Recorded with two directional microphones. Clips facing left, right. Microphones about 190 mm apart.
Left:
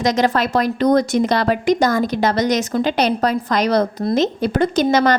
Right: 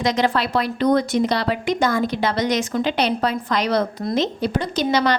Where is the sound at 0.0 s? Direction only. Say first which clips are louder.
Left 3 dB; 45° left (ahead or behind).